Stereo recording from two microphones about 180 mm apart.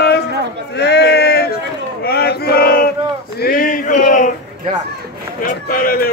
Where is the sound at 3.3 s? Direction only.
55° left (ahead or behind).